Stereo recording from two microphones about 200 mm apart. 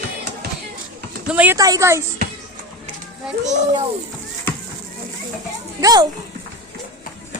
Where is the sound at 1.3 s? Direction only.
10° right (ahead or behind).